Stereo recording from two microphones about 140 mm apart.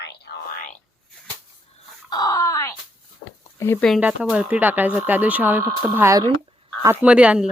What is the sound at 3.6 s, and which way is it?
Speech, 20° left (ahead or behind).